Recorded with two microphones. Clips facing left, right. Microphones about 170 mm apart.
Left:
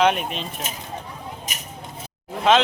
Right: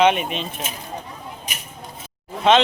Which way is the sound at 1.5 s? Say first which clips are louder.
Even; 40° left (ahead or behind).